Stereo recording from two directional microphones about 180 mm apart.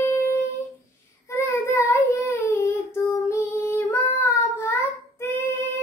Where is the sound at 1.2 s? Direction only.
15° left (ahead or behind).